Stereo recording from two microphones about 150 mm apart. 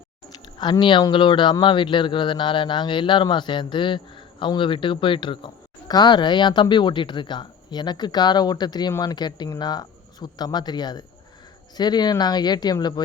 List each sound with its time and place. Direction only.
0.6 s speech: 30° left (ahead or behind)